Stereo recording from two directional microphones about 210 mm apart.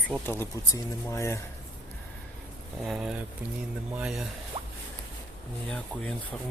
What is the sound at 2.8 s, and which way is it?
Speech, centre (ahead or behind).